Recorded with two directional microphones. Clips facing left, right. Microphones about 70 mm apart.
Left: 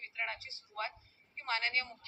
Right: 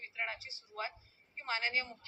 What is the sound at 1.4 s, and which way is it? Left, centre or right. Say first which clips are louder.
Speech: left 1 dB; right.